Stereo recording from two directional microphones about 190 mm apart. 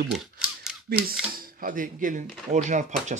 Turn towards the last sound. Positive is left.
turn(degrees=-40)  # may be behind; listen again after turning